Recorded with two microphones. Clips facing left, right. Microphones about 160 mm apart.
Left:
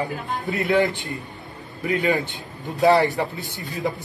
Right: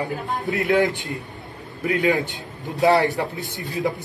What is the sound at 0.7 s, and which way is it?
Speech, 20° right (ahead or behind).